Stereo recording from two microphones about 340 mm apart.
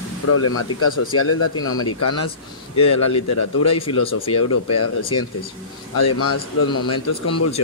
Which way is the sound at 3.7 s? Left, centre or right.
Centre.